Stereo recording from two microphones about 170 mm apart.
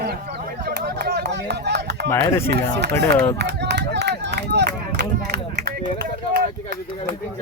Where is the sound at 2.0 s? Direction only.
15° left (ahead or behind).